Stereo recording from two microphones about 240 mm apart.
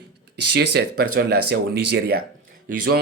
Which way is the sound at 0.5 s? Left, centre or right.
Right.